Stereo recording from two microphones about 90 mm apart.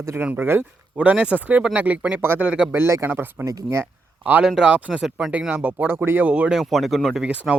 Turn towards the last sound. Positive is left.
turn(degrees=-15)  # may be behind; listen again after turning